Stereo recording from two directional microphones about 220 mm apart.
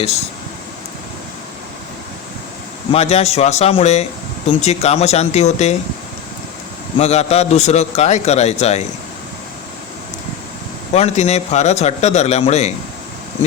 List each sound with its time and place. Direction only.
2.9 s a man's voice: 30° left (ahead or behind)
7.0 s a man's voice: 30° left (ahead or behind)
10.9 s speech: 30° left (ahead or behind)